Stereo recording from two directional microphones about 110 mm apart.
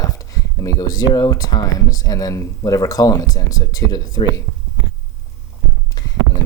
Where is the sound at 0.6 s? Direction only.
30° left (ahead or behind).